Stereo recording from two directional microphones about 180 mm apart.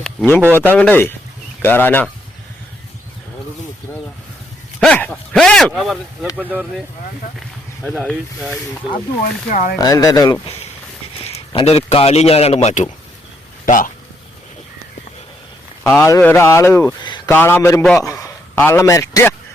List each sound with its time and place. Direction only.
0.0 s speech: 5° left (ahead or behind)
4.8 s a sound: 5° left (ahead or behind)
6.3 s speech: 5° right (ahead or behind)
8.0 s speech: centre (ahead or behind)
9.5 s speech: 45° left (ahead or behind)
9.7 s speech: 20° left (ahead or behind)
11.2 s a man's voice: 35° left (ahead or behind)
13.7 s speech: 45° left (ahead or behind)
15.8 s speech: 15° left (ahead or behind)
17.0 s speech: 25° left (ahead or behind)
17.2 s a man's voice: 15° left (ahead or behind)